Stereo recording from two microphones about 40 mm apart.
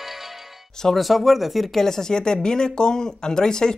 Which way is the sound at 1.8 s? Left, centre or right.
Centre.